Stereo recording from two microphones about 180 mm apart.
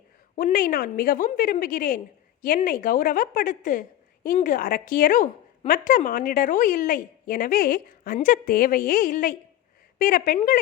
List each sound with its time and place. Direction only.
0.3 s speech: 50° left (ahead or behind)